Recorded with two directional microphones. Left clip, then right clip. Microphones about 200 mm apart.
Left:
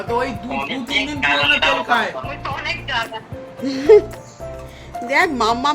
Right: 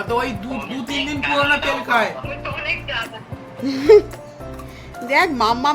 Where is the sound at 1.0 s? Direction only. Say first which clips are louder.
Left 2 dB; 25° left (ahead or behind).